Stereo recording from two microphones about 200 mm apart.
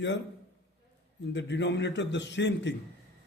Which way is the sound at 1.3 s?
60° left (ahead or behind).